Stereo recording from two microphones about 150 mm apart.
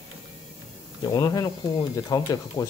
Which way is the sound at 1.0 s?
25° left (ahead or behind).